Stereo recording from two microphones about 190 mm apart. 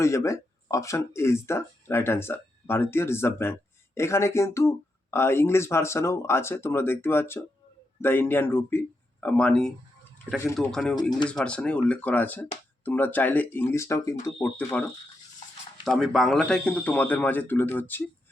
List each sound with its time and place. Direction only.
0.0 s speech: 15° left (ahead or behind)
15.8 s speech: centre (ahead or behind)